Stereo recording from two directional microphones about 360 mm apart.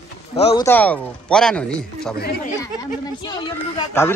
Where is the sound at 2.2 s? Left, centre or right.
Left.